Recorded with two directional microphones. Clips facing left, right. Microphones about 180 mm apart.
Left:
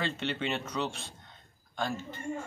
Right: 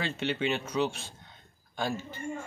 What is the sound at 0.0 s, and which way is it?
Speech, 5° right (ahead or behind).